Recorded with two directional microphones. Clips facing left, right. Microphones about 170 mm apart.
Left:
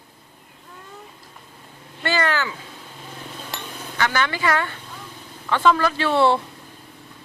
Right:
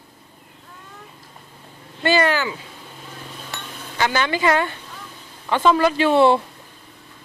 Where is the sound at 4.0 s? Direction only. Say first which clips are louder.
Right 2 dB; 20° right (ahead or behind).